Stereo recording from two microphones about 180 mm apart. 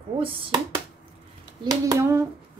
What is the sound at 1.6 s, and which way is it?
Speech, 20° right (ahead or behind).